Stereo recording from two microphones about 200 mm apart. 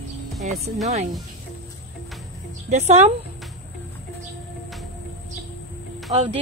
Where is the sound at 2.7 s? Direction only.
35° right (ahead or behind).